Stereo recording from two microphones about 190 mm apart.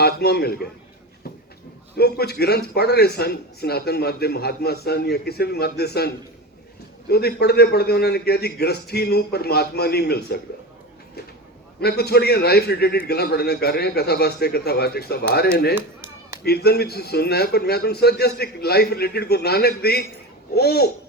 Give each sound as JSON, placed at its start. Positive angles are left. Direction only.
{"t": 0.0, "sound": "a man's voice", "side_deg": 60}
{"t": 2.0, "sound": "a man's voice", "side_deg": 55}
{"t": 11.8, "sound": "a man's voice", "side_deg": 55}